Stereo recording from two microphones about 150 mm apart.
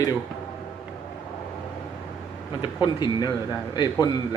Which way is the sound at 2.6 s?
30° left (ahead or behind).